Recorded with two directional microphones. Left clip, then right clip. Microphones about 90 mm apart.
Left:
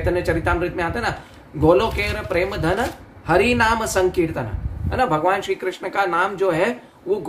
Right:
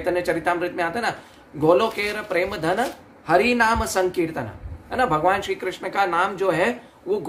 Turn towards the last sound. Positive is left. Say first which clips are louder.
# left 2 dB
turn(degrees=-30)  # may be behind; listen again after turning